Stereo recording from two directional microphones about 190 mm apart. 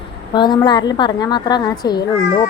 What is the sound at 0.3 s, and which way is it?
A woman's voice, 25° left (ahead or behind).